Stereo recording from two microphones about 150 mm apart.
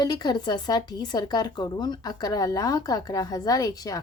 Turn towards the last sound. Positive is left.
turn(degrees=25)  # may be behind; listen again after turning